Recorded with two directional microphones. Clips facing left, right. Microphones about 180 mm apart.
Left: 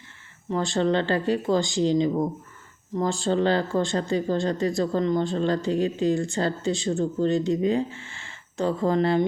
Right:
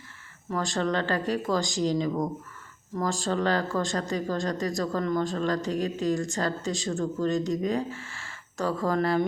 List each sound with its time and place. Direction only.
0.5 s speech: 30° left (ahead or behind)